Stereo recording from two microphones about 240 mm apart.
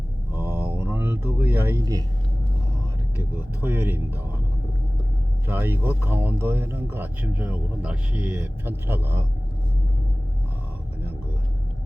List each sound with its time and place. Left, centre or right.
0.3 s a sound: centre
3.2 s speech: centre
5.5 s speech: centre